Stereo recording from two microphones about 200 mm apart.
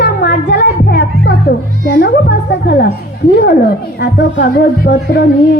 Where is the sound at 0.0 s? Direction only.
55° left (ahead or behind).